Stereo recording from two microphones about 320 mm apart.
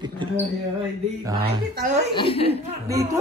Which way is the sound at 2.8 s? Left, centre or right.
Centre.